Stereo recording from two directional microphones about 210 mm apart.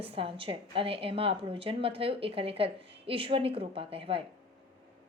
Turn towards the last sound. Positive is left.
turn(degrees=-25)  # may be behind; listen again after turning